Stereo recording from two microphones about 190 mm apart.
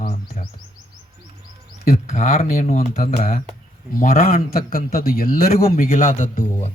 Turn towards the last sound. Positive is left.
turn(degrees=40)  # may be behind; listen again after turning